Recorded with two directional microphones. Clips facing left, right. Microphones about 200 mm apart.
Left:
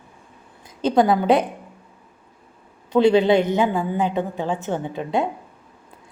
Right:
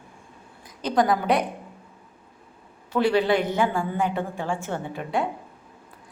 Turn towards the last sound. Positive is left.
turn(degrees=20)  # may be behind; listen again after turning